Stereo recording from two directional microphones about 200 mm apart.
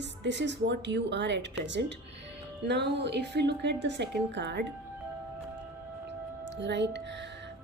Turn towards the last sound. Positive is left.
turn(degrees=-60)  # may be behind; listen again after turning